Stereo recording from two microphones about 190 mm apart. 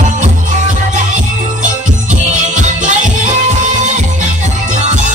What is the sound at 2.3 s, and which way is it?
Music, 40° right (ahead or behind).